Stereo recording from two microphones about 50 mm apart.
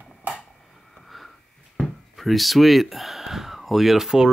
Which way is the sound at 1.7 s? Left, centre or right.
Centre.